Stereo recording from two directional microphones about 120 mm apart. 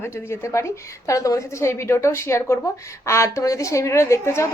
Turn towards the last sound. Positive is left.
turn(degrees=25)  # may be behind; listen again after turning